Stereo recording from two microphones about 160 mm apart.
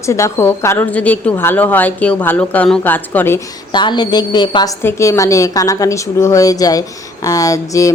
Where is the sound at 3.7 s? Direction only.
30° left (ahead or behind).